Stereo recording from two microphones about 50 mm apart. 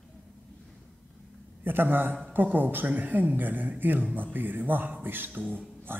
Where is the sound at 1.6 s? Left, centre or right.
Right.